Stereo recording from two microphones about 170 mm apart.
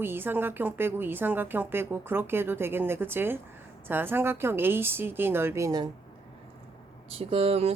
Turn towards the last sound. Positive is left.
turn(degrees=-35)  # may be behind; listen again after turning